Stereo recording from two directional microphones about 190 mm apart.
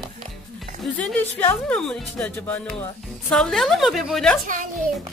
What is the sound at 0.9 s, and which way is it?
A woman's voice, 5° left (ahead or behind).